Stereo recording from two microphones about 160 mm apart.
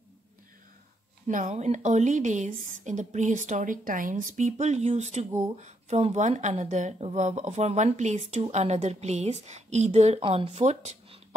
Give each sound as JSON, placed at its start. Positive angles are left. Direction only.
{"t": 1.2, "sound": "speech", "side_deg": -50}